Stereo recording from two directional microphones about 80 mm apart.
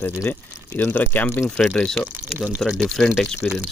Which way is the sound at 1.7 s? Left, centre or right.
Centre.